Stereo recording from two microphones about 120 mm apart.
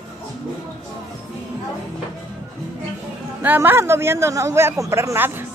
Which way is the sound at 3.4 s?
15° right (ahead or behind).